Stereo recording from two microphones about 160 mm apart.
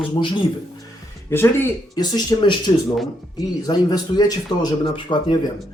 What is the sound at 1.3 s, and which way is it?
Speech, 15° left (ahead or behind).